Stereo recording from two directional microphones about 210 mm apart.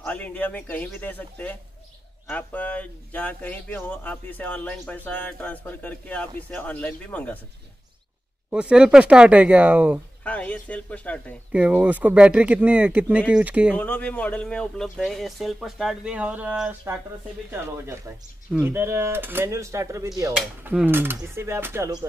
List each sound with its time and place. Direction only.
0.0 s speech: 5° left (ahead or behind)
8.5 s speech: 5° right (ahead or behind)
10.2 s speech: 5° left (ahead or behind)
11.5 s speech: 5° right (ahead or behind)
13.7 s speech: 5° left (ahead or behind); by 22.0 s 10° right (ahead or behind)